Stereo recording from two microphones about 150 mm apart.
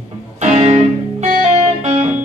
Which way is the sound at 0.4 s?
45° right (ahead or behind).